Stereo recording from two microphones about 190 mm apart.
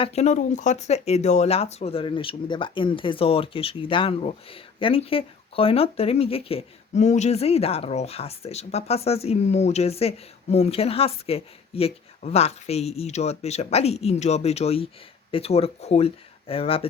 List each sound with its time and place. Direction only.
0.0 s speech: 35° left (ahead or behind)